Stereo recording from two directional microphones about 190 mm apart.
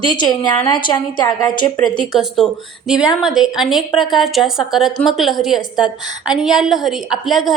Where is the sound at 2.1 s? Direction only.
Centre (ahead or behind).